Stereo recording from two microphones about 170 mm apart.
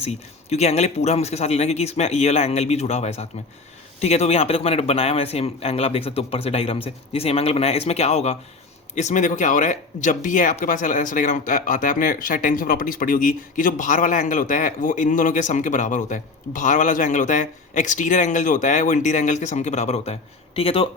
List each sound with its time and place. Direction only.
0.0 s speech: 40° left (ahead or behind)